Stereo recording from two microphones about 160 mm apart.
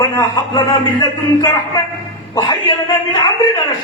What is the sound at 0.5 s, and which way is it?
A man's voice, 25° left (ahead or behind).